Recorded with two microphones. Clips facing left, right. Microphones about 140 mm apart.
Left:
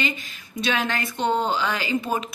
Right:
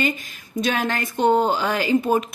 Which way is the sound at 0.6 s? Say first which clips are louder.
Right 2 dB; 45° right (ahead or behind).